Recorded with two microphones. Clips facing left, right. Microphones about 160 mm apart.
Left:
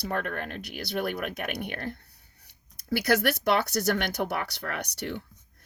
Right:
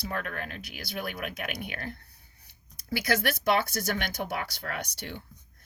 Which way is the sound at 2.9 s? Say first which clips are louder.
Left 4 dB; 65° left (ahead or behind).